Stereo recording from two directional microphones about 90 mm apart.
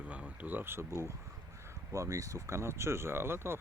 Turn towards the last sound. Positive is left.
turn(degrees=-25)  # may be behind; listen again after turning